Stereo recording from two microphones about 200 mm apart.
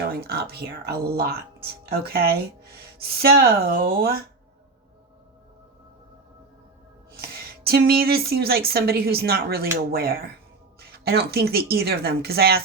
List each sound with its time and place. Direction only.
0.1 s a woman's voice: 50° right (ahead or behind)
7.2 s a woman's voice: 50° right (ahead or behind)